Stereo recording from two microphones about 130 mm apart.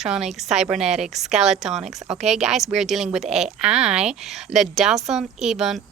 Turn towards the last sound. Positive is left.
turn(degrees=-5)  # may be behind; listen again after turning